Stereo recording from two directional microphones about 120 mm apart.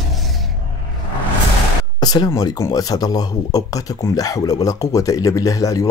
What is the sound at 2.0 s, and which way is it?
Speech, 35° left (ahead or behind).